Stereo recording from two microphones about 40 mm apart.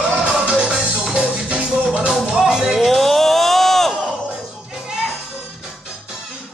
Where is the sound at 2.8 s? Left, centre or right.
Centre.